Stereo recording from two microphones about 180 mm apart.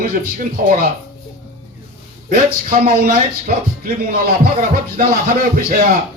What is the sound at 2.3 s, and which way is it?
Speech, 55° right (ahead or behind).